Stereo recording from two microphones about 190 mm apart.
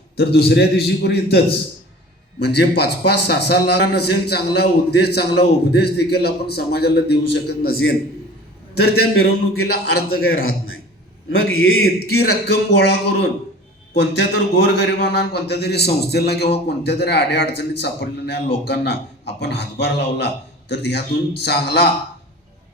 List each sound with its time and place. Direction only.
0.2 s a man's voice: 55° left (ahead or behind); by 11.9 s 90° left
11.9 s a man's voice: 55° left (ahead or behind)